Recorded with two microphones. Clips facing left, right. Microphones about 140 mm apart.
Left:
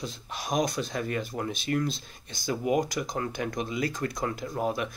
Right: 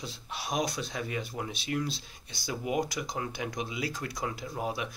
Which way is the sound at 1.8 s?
50° left (ahead or behind).